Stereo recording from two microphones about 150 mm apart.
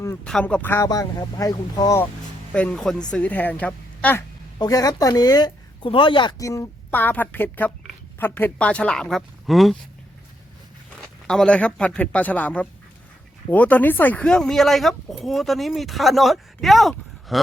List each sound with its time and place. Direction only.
0.3 s speech: 5° left (ahead or behind); by 2.0 s 30° left (ahead or behind)
2.5 s a woman's voice: 5° left (ahead or behind)
4.5 s speech: 25° left (ahead or behind)
6.4 s a woman's voice: 20° left (ahead or behind); by 9.7 s centre (ahead or behind)
10.9 s speech: 5° left (ahead or behind)
17.3 s a sound: centre (ahead or behind)